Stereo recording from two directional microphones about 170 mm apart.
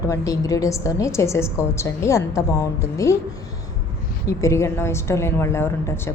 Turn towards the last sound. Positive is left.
turn(degrees=15)  # may be behind; listen again after turning